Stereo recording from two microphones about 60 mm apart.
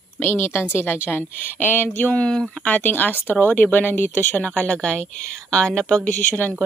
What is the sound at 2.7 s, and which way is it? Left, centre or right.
Speech, left.